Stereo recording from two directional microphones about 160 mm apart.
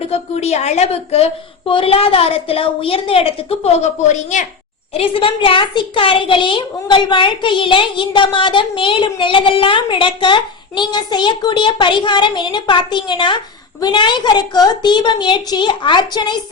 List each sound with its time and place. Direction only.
0.1 s a child's voice: 40° left (ahead or behind)
4.9 s a child's voice: 35° left (ahead or behind)